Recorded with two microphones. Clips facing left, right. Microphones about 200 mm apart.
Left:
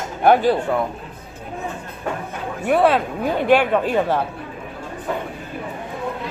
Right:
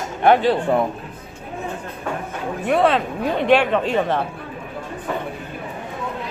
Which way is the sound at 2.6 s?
5° left (ahead or behind).